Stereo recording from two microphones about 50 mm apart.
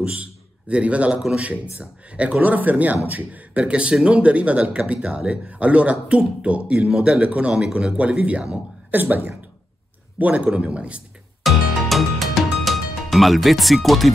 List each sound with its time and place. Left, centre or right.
0.0 s a man's voice: right
8.9 s speech: right
11.4 s music: centre